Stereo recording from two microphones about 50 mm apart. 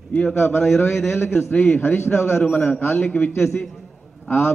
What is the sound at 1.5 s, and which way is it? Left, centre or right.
Speech, left.